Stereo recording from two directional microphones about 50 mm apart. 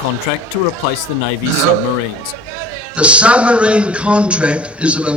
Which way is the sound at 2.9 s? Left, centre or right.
Right.